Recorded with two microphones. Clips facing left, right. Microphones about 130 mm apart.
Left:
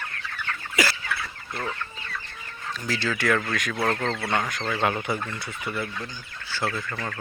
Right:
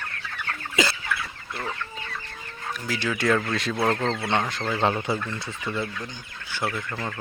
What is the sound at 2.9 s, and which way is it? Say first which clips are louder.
Speech: right 1 dB; 15° right (ahead or behind).